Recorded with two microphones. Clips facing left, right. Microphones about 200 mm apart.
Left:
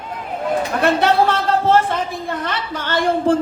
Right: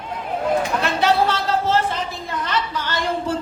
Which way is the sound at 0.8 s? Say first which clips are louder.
Left 3 dB; 50° left (ahead or behind).